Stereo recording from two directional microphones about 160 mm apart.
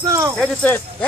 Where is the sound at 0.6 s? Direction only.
10° left (ahead or behind).